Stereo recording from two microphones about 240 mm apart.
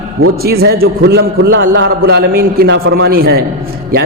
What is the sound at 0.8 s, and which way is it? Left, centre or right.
A man's voice, right.